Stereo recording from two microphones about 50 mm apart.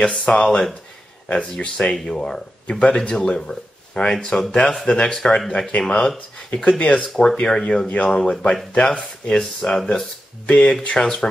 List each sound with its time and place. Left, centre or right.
0.0 s speech: left
3.0 s speech: centre
7.9 s speech: left
8.2 s speech: centre
9.4 s speech: centre
10.4 s speech: centre